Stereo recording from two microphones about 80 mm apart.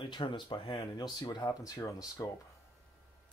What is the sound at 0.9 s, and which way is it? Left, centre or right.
Speech, left.